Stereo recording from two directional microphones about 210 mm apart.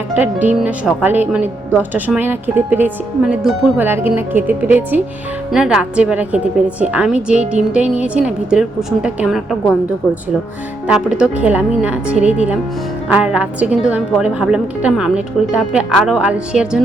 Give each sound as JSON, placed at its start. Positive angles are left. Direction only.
{"t": 0.2, "sound": "a woman's voice", "side_deg": -5}
{"t": 10.8, "sound": "a woman's voice", "side_deg": -5}